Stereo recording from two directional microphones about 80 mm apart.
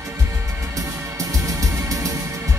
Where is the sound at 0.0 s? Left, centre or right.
Right.